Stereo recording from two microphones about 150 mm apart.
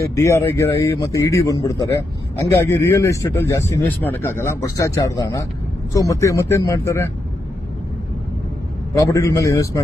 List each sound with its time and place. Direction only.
0.0 s a man's voice: 20° left (ahead or behind)
9.0 s a man's voice: 20° left (ahead or behind)